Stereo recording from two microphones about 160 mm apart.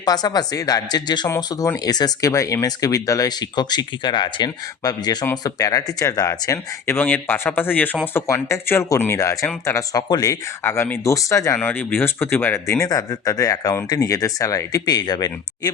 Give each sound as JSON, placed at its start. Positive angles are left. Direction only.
{"t": 0.0, "sound": "speech", "side_deg": 25}